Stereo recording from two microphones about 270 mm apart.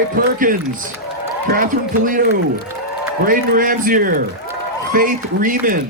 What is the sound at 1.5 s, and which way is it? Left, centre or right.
Speech, right.